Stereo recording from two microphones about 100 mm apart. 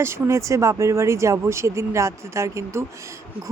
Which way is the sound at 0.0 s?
30° right (ahead or behind).